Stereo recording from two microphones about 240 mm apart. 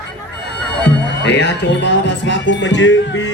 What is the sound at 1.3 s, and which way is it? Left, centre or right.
Speech, left.